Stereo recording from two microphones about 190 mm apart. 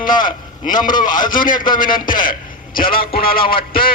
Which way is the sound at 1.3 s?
45° left (ahead or behind).